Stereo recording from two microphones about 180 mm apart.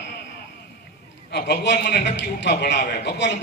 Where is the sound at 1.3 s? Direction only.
70° left (ahead or behind).